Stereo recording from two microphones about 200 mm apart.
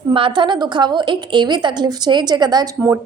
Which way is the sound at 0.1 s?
25° right (ahead or behind).